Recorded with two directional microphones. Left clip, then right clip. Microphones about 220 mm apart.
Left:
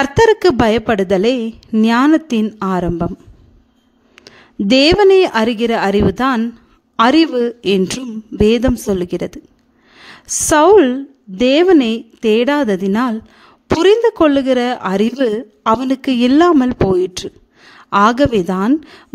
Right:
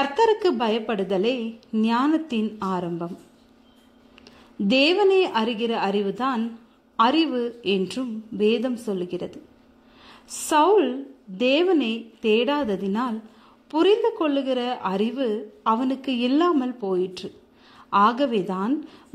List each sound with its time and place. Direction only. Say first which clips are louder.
0.0 s a woman's voice: left 9 dB; 45° left (ahead or behind)
4.1 s a woman's voice: left 9 dB; 45° left (ahead or behind)